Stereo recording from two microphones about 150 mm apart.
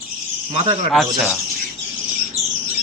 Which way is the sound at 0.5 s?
40° right (ahead or behind).